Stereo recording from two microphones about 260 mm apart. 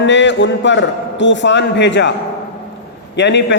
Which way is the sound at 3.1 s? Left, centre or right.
Left.